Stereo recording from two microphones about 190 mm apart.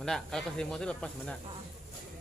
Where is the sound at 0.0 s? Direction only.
5° left (ahead or behind).